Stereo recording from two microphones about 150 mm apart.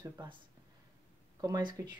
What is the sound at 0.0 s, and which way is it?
Speech, 25° right (ahead or behind).